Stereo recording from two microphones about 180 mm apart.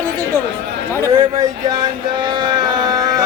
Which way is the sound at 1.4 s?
25° right (ahead or behind).